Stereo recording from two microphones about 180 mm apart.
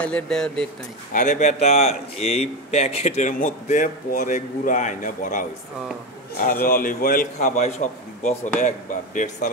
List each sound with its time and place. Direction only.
0.0 s speech: 5° left (ahead or behind)
1.1 s speech: 45° left (ahead or behind)